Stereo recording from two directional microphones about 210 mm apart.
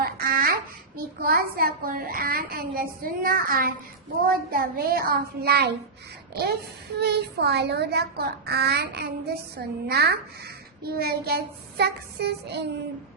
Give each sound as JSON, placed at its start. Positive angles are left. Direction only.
{"t": 0.0, "sound": "babbling", "side_deg": -45}
{"t": 0.9, "sound": "a child's voice", "side_deg": -45}